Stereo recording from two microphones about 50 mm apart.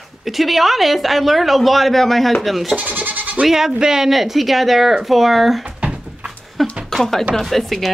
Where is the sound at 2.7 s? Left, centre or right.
Right.